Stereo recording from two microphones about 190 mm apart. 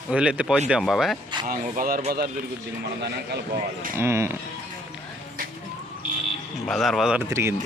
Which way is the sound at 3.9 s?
15° right (ahead or behind).